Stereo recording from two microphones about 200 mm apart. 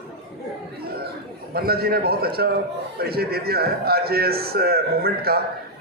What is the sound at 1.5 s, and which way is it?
A man's voice, 50° right (ahead or behind).